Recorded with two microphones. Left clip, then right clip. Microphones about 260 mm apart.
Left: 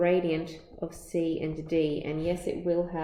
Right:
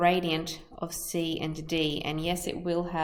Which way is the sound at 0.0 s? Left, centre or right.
Right.